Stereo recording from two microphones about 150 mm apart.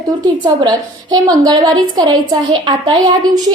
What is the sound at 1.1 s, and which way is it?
A woman's voice, 25° right (ahead or behind).